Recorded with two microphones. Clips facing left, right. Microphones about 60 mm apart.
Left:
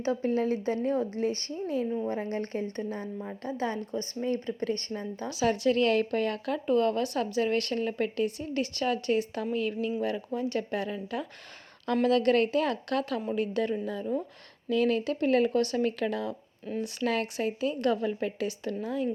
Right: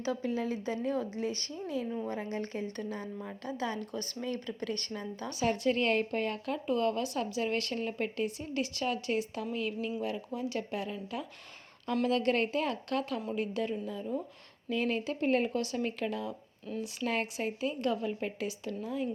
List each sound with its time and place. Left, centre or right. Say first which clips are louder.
0.0 s speech: left 5 dB; left
5.3 s speech: left 4 dB; left
6.7 s a woman's voice: left 5 dB; left
14.7 s a woman's voice: left 6 dB; left